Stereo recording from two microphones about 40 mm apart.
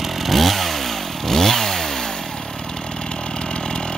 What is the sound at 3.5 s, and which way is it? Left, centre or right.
Chainsaw, left.